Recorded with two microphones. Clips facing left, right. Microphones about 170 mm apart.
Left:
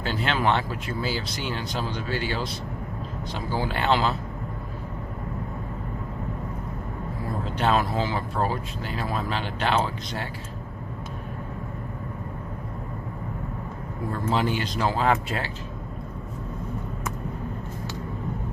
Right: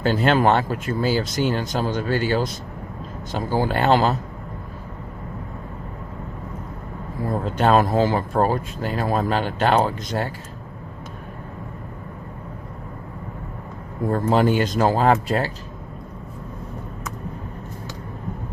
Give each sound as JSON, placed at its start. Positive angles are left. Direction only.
{"t": 0.0, "sound": "speech", "side_deg": -45}
{"t": 7.6, "sound": "speech", "side_deg": -45}
{"t": 14.1, "sound": "speech", "side_deg": -50}